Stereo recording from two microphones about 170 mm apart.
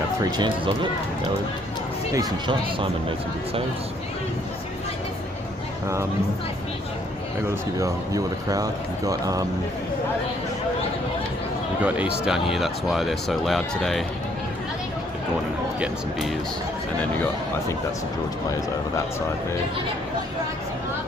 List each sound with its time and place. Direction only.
0.2 s speech: 25° right (ahead or behind)
2.1 s speech: 30° right (ahead or behind)
7.5 s speech: 20° right (ahead or behind)
11.8 s speech: 5° right (ahead or behind)
15.8 s speech: centre (ahead or behind)